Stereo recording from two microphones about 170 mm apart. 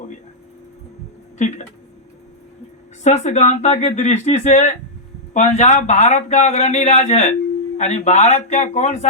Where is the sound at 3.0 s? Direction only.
40° left (ahead or behind).